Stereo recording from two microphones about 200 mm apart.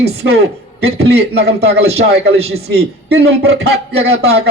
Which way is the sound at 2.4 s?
30° right (ahead or behind).